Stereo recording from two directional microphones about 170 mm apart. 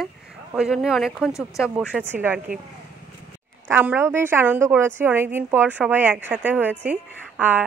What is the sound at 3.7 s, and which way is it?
Speech, 10° right (ahead or behind).